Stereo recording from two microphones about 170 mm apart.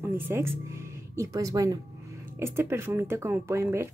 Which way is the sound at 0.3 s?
15° right (ahead or behind).